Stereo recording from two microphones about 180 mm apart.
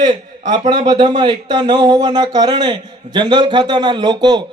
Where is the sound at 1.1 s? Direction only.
25° right (ahead or behind).